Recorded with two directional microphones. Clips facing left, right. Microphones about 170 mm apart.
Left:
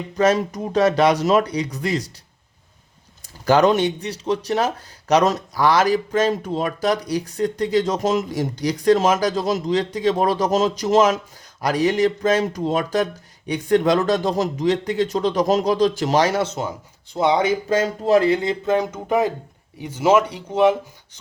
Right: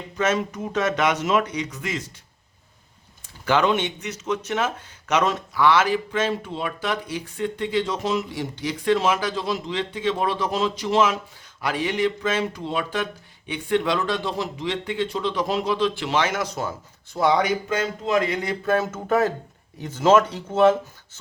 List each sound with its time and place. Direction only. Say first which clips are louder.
0.2 s speech: left 5 dB; 35° left (ahead or behind)
3.4 s speech: left 5 dB; 40° left (ahead or behind); by 17.5 s 20° left (ahead or behind)
17.7 s speech: left 6 dB; 40° left (ahead or behind); by 20.7 s 15° left (ahead or behind)